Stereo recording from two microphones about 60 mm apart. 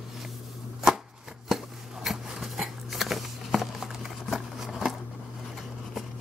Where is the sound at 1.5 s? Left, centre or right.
Centre.